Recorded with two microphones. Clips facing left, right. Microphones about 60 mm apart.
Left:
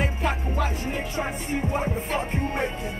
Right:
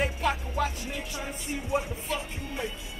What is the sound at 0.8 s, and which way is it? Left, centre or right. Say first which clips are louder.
Music: left 7 dB; left.